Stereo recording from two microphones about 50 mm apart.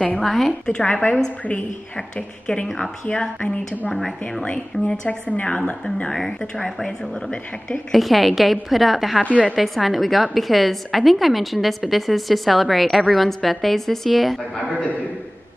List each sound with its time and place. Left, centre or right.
0.2 s a woman's voice: centre
0.7 s a woman's voice: left
3.9 s speech: centre
4.5 s a woman's voice: left
6.1 s a woman's voice: centre
9.2 s a woman's voice: left
9.6 s a woman's voice: centre